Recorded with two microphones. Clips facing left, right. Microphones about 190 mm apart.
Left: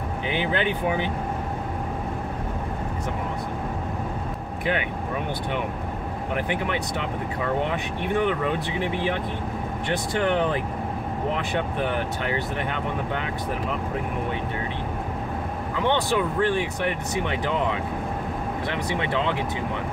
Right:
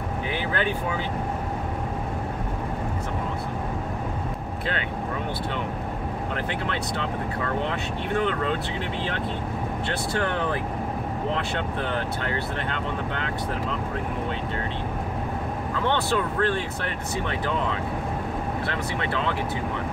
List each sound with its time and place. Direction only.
0.3 s speech: 20° left (ahead or behind)
6.3 s speech: 15° left (ahead or behind)
15.7 s speech: 15° left (ahead or behind)